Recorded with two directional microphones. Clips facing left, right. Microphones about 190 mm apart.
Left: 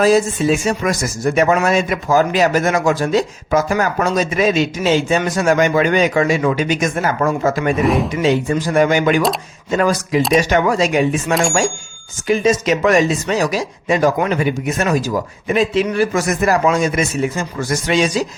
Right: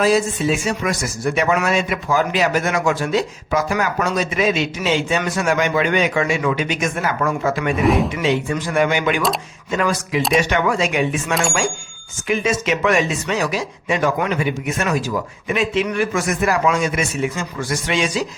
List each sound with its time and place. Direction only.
0.0 s speech: 40° left (ahead or behind)
7.8 s speech: centre (ahead or behind)
8.1 s speech: 40° left (ahead or behind)